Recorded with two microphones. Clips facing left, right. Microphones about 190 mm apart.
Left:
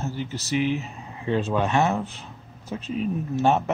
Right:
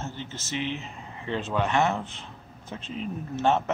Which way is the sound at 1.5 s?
15° left (ahead or behind).